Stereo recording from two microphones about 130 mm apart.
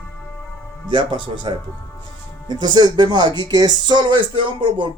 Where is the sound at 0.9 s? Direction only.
35° right (ahead or behind).